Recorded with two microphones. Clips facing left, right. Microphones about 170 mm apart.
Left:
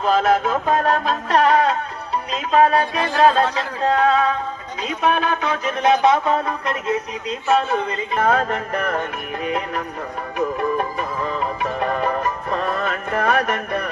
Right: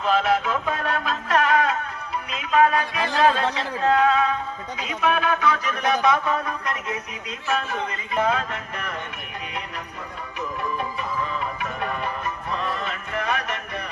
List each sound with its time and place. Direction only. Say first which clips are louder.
0.0 s a sound: left 4 dB; 40° left (ahead or behind)
2.3 s speech: left 3 dB; 35° left (ahead or behind)
4.8 s music: left 3 dB; 30° left (ahead or behind)
8.2 s music: left 5 dB; 50° left (ahead or behind)